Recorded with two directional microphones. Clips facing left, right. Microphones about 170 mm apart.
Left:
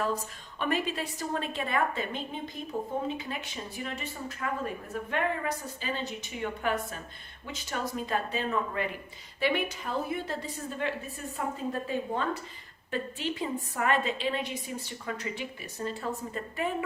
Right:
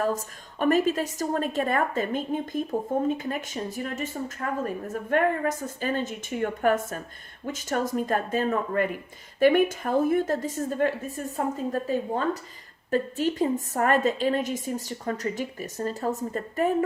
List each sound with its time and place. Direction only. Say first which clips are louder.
0.0 s speech: right 4 dB; 45° right (ahead or behind)